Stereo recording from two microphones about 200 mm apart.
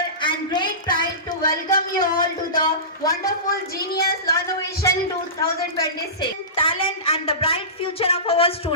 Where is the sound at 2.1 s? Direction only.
45° left (ahead or behind).